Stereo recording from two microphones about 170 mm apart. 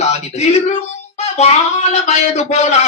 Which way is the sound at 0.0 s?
40° left (ahead or behind).